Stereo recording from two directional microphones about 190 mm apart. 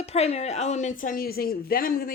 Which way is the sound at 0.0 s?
35° left (ahead or behind).